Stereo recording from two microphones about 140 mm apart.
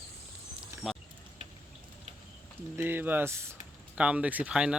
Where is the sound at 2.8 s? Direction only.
15° right (ahead or behind).